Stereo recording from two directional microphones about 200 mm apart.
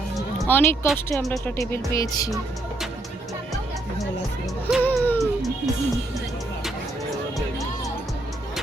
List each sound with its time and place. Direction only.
0.3 s speech: 10° left (ahead or behind)
1.5 s music: 15° left (ahead or behind)
4.8 s music: 10° left (ahead or behind)